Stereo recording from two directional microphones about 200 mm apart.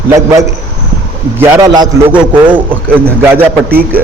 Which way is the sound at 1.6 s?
20° right (ahead or behind).